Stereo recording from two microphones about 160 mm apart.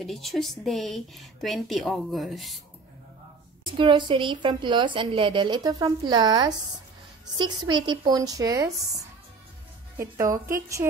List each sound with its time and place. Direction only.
0.0 s a woman's voice: centre (ahead or behind)
3.7 s a woman's voice: 30° right (ahead or behind)